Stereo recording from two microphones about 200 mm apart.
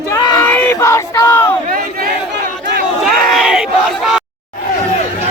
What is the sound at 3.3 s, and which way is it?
Battle cry, centre (ahead or behind).